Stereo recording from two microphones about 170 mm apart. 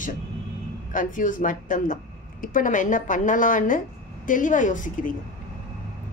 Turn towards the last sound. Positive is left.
turn(degrees=50)  # may be behind; listen again after turning